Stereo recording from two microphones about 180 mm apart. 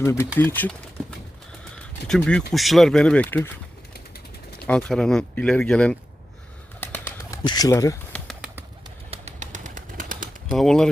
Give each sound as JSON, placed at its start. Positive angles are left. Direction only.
{"t": 0.0, "sound": "speech", "side_deg": 15}
{"t": 2.0, "sound": "speech", "side_deg": 5}
{"t": 4.6, "sound": "speech", "side_deg": 5}
{"t": 6.7, "sound": "bird", "side_deg": 10}
{"t": 7.4, "sound": "speech", "side_deg": 20}
{"t": 8.1, "sound": "bird", "side_deg": 5}
{"t": 9.0, "sound": "bird", "side_deg": -35}
{"t": 10.5, "sound": "speech", "side_deg": 0}